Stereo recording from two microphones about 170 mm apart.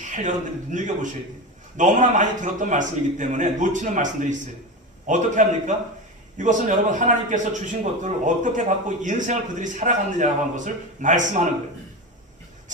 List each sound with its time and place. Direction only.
0.0 s a man's voice: 45° right (ahead or behind)